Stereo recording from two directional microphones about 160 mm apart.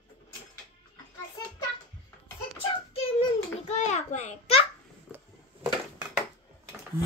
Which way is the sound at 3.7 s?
45° left (ahead or behind).